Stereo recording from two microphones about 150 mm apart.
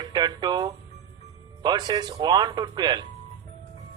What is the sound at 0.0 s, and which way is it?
Speech, 30° right (ahead or behind).